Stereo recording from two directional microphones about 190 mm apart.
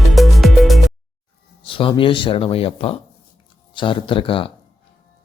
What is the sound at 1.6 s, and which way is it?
A man's voice, 30° left (ahead or behind).